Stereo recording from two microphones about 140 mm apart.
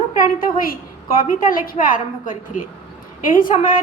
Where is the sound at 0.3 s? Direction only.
90° left.